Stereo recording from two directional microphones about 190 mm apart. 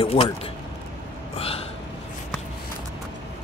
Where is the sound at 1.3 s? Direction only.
30° left (ahead or behind).